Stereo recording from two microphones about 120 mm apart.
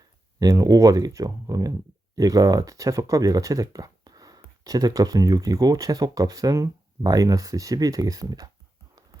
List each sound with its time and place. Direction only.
0.3 s speech: 30° right (ahead or behind)